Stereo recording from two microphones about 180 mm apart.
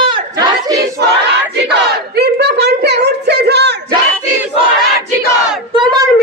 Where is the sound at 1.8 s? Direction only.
65° right (ahead or behind).